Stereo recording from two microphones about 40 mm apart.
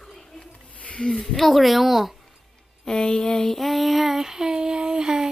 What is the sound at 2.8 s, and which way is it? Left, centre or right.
Speech, centre.